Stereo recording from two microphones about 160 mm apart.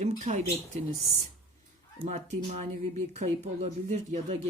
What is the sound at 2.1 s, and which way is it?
Speech, 45° right (ahead or behind).